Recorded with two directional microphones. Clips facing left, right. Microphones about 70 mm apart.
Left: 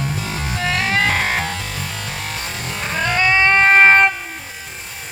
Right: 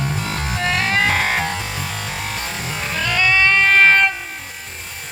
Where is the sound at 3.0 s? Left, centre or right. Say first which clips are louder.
Left 1 dB; left.